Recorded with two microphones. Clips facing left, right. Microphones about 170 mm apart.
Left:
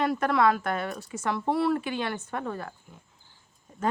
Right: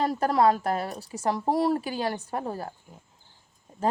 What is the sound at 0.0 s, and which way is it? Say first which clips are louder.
A woman's voice: right 1 dB; 35° right (ahead or behind).